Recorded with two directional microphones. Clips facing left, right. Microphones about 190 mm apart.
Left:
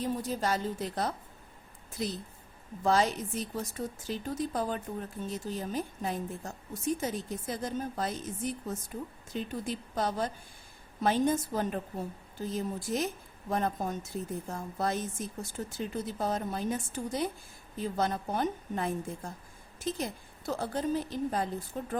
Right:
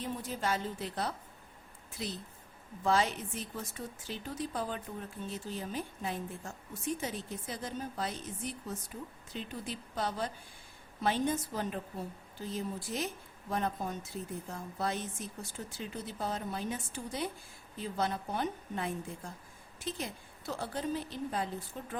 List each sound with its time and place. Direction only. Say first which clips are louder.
0.0 s a woman's voice: left 5 dB; 40° left (ahead or behind)
2.8 s a woman's voice: left 3 dB; 40° left (ahead or behind)